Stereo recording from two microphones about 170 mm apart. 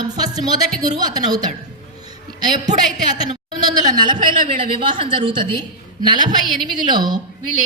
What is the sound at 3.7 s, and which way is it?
A woman's voice, 25° right (ahead or behind).